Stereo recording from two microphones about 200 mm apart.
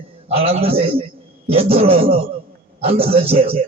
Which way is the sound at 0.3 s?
30° right (ahead or behind).